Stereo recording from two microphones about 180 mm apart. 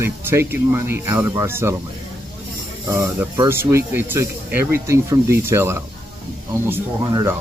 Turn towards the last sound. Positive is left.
turn(degrees=-20)  # may be behind; listen again after turning